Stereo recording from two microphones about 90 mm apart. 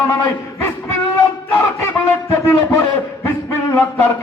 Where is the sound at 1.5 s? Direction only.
20° left (ahead or behind).